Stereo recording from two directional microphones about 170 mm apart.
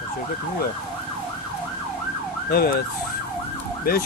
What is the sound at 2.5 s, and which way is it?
Ambulance, 60° left (ahead or behind).